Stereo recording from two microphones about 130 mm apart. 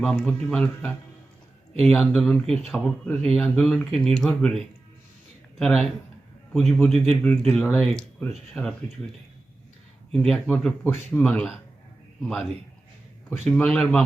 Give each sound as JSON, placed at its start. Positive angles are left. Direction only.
{"t": 0.0, "sound": "a man's voice", "side_deg": 5}
{"t": 10.1, "sound": "speech", "side_deg": 5}
{"t": 13.4, "sound": "speech", "side_deg": 10}